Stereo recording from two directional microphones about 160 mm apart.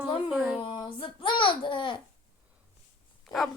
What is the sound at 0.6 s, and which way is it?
Speech, 30° left (ahead or behind).